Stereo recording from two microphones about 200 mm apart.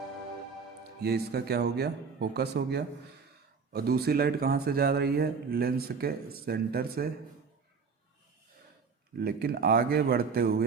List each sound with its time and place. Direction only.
1.0 s speech: 55° right (ahead or behind)
9.1 s speech: 50° right (ahead or behind)